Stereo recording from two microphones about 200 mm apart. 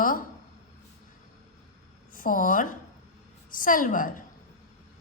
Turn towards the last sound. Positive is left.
turn(degrees=40)  # may be behind; listen again after turning